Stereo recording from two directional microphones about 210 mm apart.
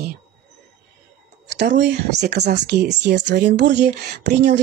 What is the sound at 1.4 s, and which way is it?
Speech, 55° right (ahead or behind).